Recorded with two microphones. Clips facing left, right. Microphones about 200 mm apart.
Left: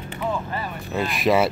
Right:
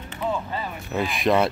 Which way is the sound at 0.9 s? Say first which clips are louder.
Left 1 dB; centre (ahead or behind).